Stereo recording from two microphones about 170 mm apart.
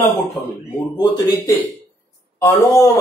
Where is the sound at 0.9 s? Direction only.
25° left (ahead or behind).